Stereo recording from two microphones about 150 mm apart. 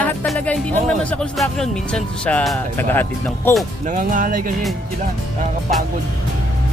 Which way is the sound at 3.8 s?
60° right (ahead or behind).